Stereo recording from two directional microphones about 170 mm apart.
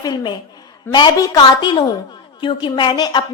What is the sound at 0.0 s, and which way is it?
A woman's voice, 25° left (ahead or behind).